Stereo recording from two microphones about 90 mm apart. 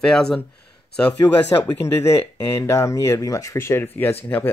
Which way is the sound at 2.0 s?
35° left (ahead or behind).